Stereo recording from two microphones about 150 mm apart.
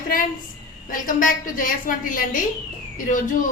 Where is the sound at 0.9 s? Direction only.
65° left (ahead or behind).